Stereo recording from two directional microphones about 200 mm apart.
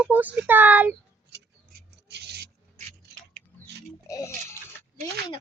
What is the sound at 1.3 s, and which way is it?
Rub, 55° right (ahead or behind).